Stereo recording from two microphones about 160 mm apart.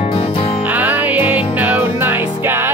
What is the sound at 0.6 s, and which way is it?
Music, 10° right (ahead or behind).